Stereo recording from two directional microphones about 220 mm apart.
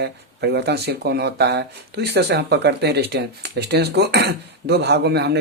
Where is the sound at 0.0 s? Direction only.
50° right (ahead or behind).